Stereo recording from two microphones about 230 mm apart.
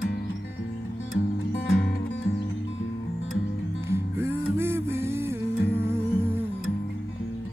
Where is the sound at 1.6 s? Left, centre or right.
Left.